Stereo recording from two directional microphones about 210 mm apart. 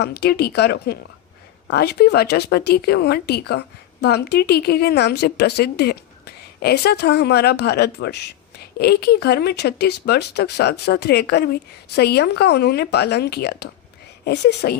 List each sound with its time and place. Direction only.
0.0 s a woman's voice: 50° left (ahead or behind)